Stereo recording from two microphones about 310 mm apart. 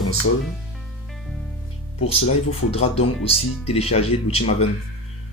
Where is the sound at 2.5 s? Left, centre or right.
Centre.